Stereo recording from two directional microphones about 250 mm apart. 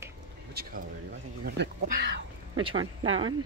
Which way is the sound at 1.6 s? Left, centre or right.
Right.